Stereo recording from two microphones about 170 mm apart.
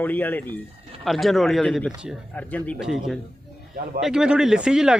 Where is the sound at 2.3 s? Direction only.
10° left (ahead or behind).